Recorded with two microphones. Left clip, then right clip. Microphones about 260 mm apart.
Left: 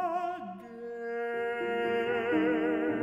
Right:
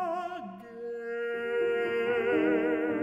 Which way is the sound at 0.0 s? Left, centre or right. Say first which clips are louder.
Left 1 dB; right.